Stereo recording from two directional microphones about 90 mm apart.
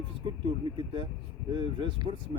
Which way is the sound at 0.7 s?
65° right (ahead or behind).